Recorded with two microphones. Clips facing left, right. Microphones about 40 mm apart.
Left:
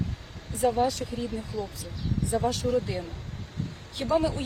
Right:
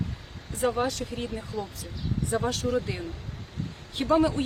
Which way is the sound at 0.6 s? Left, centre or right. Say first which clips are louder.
Left 2 dB; right.